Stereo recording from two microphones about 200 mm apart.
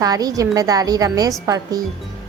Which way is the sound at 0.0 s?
20° right (ahead or behind).